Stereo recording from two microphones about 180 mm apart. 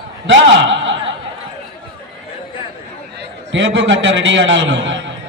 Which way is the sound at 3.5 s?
90° right.